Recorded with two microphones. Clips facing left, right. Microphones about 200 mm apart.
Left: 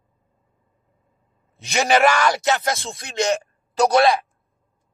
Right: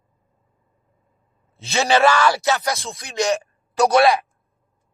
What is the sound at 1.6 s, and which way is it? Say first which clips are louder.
A man's voice: even; 15° left (ahead or behind).